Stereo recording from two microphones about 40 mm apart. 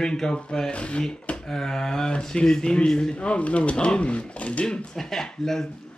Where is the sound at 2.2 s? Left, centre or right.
Centre; by 4.6 s left.